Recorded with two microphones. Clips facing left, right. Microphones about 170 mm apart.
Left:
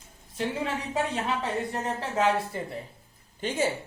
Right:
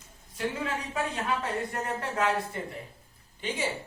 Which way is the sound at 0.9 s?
25° left (ahead or behind).